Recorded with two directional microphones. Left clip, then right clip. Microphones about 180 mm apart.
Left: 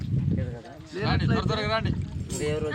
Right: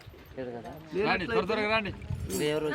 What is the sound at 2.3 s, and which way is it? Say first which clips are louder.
Speech: even; 25° right (ahead or behind).